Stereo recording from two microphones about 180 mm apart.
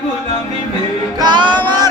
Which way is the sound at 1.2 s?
25° right (ahead or behind).